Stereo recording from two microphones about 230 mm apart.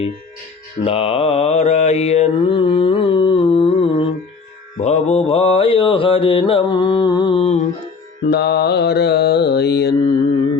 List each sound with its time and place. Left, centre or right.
0.9 s mantra: left
8.3 s mantra: left